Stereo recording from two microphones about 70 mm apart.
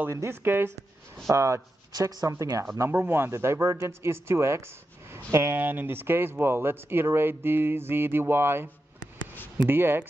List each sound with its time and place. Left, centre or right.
0.1 s speech: right
1.3 s speech: right
1.9 s speech: right
2.9 s speech: right
9.7 s speech: right